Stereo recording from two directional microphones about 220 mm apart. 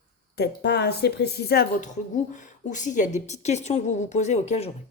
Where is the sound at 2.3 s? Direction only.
35° left (ahead or behind).